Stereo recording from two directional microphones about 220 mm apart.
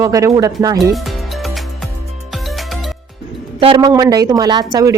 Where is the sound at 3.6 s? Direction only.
25° right (ahead or behind).